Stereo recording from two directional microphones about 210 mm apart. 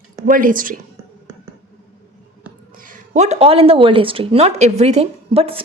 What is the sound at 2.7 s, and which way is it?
A woman's voice, 40° right (ahead or behind).